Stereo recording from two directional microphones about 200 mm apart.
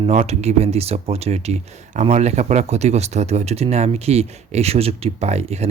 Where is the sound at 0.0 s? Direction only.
30° right (ahead or behind).